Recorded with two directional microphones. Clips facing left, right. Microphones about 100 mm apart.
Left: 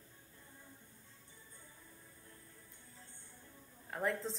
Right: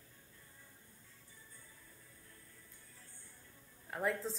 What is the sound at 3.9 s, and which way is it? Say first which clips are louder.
Speech: even; centre (ahead or behind).